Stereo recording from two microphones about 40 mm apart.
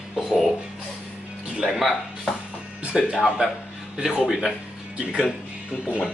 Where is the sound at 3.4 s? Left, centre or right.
Right.